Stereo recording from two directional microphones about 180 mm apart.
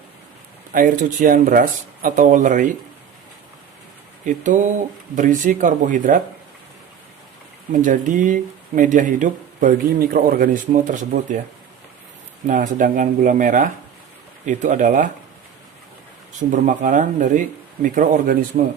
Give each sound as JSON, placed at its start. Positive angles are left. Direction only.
{"t": 0.7, "sound": "speech", "side_deg": -50}
{"t": 4.3, "sound": "speech", "side_deg": -45}
{"t": 7.7, "sound": "speech", "side_deg": -45}
{"t": 12.5, "sound": "speech", "side_deg": -45}
{"t": 16.4, "sound": "speech", "side_deg": -45}